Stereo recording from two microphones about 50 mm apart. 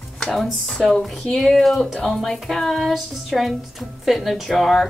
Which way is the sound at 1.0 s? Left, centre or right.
Centre.